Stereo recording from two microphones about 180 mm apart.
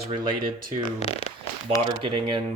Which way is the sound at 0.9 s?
35° left (ahead or behind).